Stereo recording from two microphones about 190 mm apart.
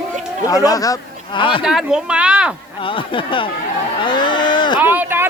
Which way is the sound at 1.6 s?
5° right (ahead or behind).